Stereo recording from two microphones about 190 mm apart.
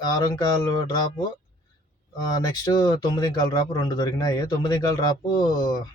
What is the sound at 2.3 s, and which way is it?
Speech, 20° left (ahead or behind).